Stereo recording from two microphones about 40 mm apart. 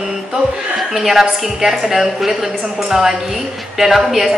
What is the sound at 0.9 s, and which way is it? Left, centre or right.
A woman's voice, centre.